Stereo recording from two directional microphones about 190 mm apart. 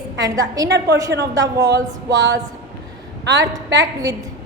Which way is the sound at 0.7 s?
65° right (ahead or behind).